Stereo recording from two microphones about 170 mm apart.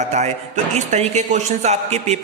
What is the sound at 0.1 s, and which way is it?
A man's voice, 40° right (ahead or behind).